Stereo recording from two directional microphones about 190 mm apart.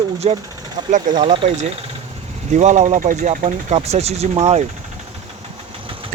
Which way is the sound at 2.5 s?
40° right (ahead or behind).